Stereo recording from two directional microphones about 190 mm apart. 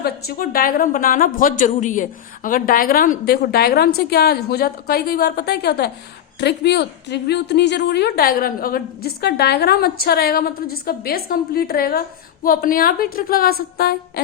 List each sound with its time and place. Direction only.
0.0 s a woman's voice: 50° left (ahead or behind)